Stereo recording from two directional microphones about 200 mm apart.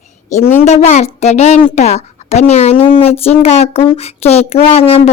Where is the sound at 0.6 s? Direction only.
35° left (ahead or behind).